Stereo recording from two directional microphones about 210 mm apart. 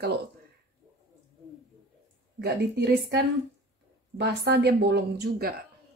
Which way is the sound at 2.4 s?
55° right (ahead or behind).